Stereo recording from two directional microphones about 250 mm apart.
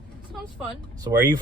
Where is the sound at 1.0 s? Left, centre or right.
Centre.